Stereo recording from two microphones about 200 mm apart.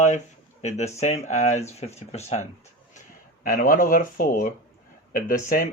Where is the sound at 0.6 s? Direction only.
35° left (ahead or behind).